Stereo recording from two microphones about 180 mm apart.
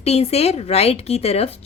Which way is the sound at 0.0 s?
35° left (ahead or behind).